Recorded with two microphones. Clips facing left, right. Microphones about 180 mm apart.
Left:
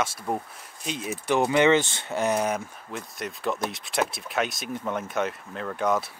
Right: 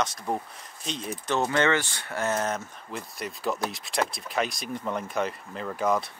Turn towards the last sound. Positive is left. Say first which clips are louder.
# left 1 dB
turn(degrees=0)  # may be behind; listen again after turning